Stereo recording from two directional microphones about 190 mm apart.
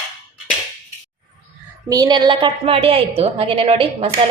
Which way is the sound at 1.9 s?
20° right (ahead or behind).